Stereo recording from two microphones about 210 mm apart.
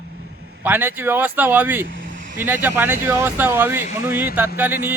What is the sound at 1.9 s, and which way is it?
Vehicle, 65° right (ahead or behind).